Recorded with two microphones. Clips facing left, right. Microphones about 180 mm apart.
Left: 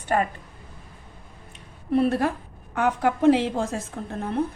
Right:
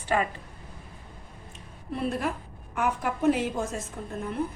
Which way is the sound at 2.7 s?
70° left (ahead or behind).